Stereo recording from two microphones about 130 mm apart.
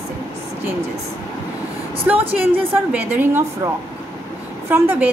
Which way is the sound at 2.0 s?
15° right (ahead or behind).